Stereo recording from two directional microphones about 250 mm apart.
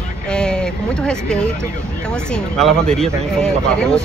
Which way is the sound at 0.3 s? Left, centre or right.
Centre.